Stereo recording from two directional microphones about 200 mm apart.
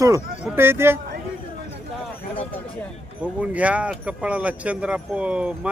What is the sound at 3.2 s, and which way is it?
Speech, 5° right (ahead or behind).